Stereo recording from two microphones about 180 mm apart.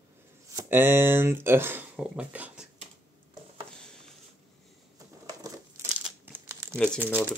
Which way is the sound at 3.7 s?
5° left (ahead or behind).